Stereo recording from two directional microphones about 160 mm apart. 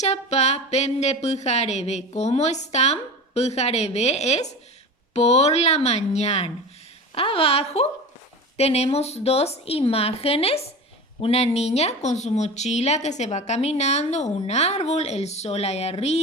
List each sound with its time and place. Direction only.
0.0 s a woman's voice: 45° left (ahead or behind)